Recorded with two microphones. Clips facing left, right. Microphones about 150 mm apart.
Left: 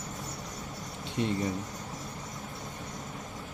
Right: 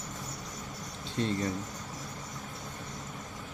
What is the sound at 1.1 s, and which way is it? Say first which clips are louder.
Speech: left 1 dB; 15° left (ahead or behind).